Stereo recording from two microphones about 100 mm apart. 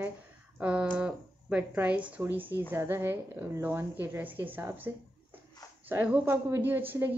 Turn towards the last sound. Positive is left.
turn(degrees=-20)  # may be behind; listen again after turning